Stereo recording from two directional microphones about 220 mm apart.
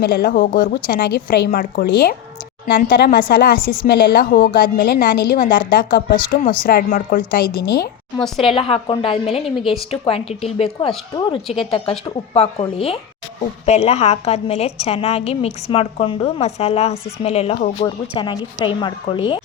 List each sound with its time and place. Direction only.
0.0 s a woman's voice: 45° left (ahead or behind)
8.4 s a woman's voice: 25° left (ahead or behind)
9.4 s a woman's voice: centre (ahead or behind)
9.9 s a woman's voice: 25° left (ahead or behind)